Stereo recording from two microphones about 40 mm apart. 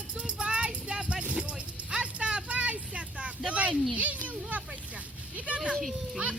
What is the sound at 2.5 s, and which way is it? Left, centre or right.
Vehicle, right.